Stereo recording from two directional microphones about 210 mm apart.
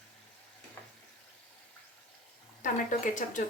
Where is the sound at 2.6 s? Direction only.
35° left (ahead or behind).